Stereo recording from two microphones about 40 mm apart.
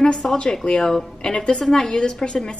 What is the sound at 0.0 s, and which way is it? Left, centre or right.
A woman's voice, centre.